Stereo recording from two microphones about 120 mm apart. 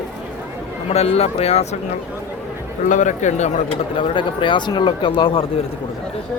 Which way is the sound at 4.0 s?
45° left (ahead or behind).